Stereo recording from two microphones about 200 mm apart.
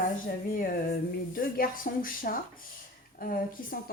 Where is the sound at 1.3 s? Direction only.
45° left (ahead or behind).